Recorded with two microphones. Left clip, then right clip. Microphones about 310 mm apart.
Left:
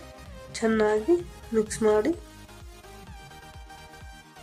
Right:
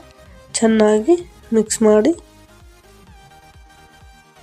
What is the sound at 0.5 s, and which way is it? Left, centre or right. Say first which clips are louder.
A woman's voice: right 9 dB; right.